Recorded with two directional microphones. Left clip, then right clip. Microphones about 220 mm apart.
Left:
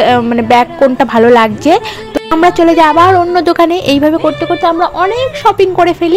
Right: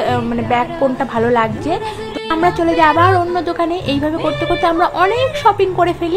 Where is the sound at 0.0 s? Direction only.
30° left (ahead or behind).